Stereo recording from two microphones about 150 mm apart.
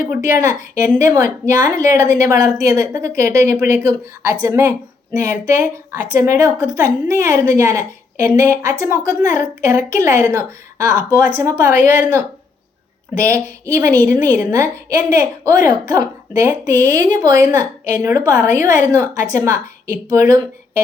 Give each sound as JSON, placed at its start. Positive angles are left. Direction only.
{"t": 0.9, "sound": "a woman's voice", "side_deg": -20}